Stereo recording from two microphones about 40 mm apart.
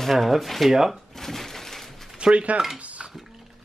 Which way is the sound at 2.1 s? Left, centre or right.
Right.